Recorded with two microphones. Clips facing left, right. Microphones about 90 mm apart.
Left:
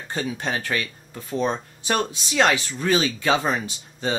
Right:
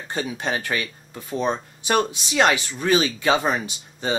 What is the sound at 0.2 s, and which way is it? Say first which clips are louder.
Speech: right 1 dB; 5° right (ahead or behind).